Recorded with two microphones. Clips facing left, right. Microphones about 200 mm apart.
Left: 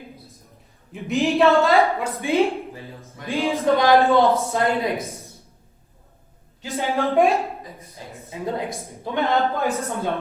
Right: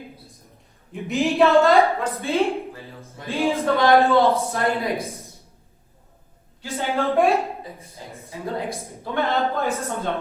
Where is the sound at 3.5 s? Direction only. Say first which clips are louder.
Left 2 dB; 20° left (ahead or behind).